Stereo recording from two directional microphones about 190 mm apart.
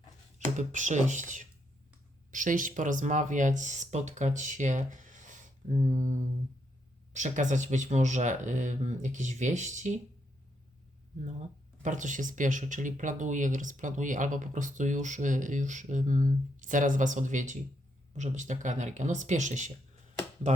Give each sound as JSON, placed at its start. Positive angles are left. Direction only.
{"t": 0.3, "sound": "speech", "side_deg": -40}
{"t": 2.3, "sound": "speech", "side_deg": -45}
{"t": 7.1, "sound": "speech", "side_deg": -40}
{"t": 11.8, "sound": "speech", "side_deg": -40}